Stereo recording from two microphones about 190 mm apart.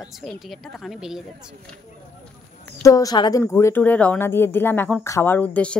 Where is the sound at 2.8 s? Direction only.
20° left (ahead or behind).